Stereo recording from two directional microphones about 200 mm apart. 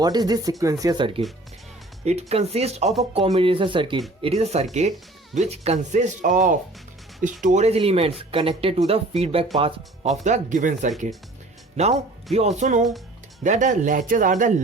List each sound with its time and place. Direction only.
0.0 s speech: 20° right (ahead or behind); by 14.5 s 40° right (ahead or behind)